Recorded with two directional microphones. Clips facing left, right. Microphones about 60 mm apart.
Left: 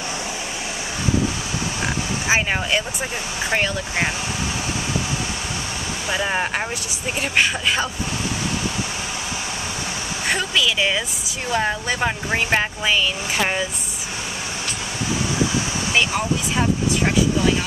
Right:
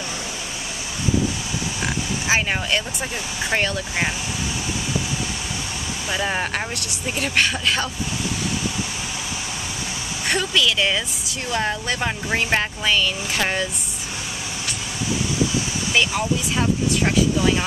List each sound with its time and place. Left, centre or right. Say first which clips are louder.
2.2 s speech: left 1 dB; centre
6.0 s speech: left 1 dB; centre
10.2 s speech: even; centre
15.9 s speech: even; centre